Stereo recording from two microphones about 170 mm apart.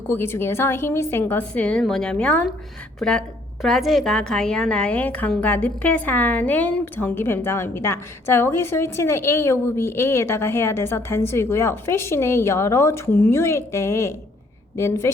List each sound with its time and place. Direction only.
0.1 s a woman's voice: 15° left (ahead or behind)